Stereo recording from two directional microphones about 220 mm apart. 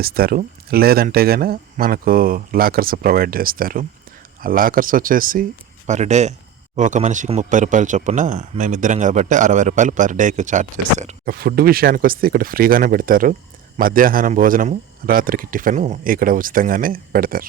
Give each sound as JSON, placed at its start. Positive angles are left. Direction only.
{"t": 0.0, "sound": "speech", "side_deg": -45}